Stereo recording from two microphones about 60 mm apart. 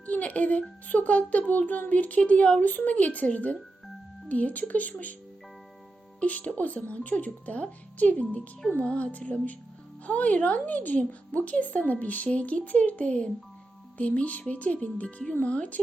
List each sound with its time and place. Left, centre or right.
0.0 s a woman's voice: left
6.1 s a woman's voice: left